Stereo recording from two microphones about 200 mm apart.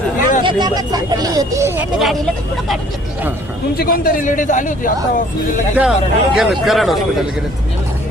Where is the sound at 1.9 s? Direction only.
Centre (ahead or behind).